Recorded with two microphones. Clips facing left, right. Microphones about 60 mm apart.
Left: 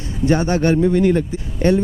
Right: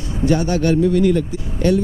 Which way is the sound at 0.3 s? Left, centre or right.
Left.